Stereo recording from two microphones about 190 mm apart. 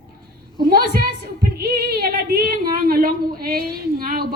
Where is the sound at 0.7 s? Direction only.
50° right (ahead or behind).